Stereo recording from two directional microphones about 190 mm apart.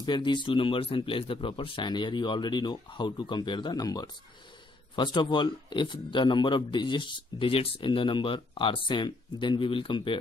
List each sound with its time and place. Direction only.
0.0 s a man's voice: 25° left (ahead or behind)